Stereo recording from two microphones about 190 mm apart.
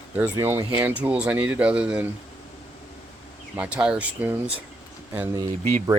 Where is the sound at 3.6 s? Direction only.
5° right (ahead or behind).